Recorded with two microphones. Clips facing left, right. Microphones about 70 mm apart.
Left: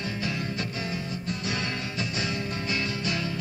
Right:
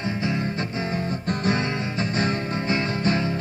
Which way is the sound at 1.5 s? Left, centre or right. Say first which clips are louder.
Right 6 dB; right.